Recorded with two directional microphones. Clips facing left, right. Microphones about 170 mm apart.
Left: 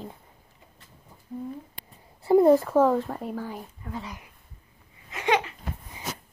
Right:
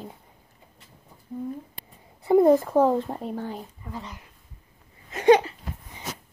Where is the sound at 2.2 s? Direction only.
20° right (ahead or behind).